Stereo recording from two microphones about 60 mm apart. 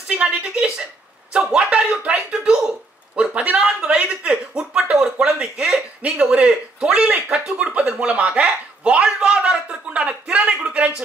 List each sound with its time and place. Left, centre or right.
0.1 s speech: centre